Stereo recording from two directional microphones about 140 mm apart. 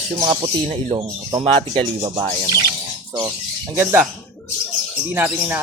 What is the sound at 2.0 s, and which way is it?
Speech, 30° right (ahead or behind).